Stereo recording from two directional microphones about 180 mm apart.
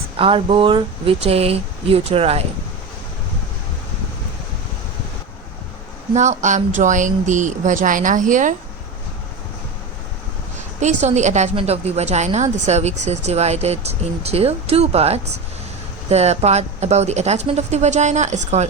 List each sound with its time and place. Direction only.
0.2 s a woman's voice: 30° right (ahead or behind)
6.1 s speech: 40° right (ahead or behind)
10.8 s a woman's voice: 40° right (ahead or behind)